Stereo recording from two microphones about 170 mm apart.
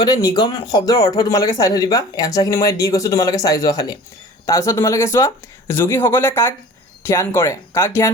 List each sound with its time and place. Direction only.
0.0 s speech: 25° left (ahead or behind)